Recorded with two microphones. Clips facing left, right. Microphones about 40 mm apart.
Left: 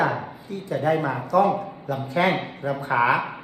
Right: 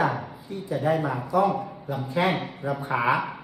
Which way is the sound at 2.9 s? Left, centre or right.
Left.